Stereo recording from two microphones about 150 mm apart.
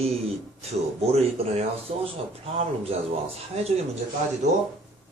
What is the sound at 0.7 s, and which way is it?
Speech, 45° right (ahead or behind).